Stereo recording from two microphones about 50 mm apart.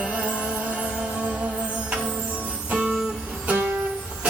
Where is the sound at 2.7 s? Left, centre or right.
Right.